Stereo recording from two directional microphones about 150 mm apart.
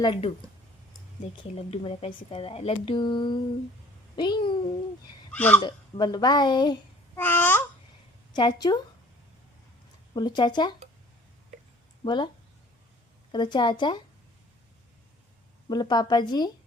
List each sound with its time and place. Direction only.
0.0 s speech: 35° left (ahead or behind)
1.7 s speech: 40° left (ahead or behind)
5.3 s speech: 10° left (ahead or behind)
5.5 s speech: 30° left (ahead or behind)
7.2 s babbling: 15° left (ahead or behind)
8.3 s speech: 30° left (ahead or behind)
10.2 s speech: 30° left (ahead or behind)
12.0 s speech: 30° left (ahead or behind)
13.3 s speech: 30° left (ahead or behind)
15.7 s speech: 30° left (ahead or behind)